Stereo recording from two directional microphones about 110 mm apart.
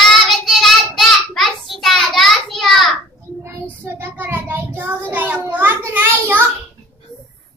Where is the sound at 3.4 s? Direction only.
20° right (ahead or behind).